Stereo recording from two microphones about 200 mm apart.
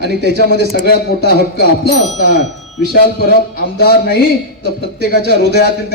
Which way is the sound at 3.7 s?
50° left (ahead or behind).